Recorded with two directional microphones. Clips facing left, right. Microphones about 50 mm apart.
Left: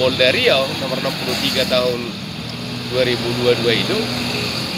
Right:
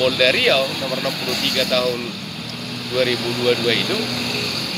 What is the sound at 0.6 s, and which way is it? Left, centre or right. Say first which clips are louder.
Speech: left 2 dB; centre.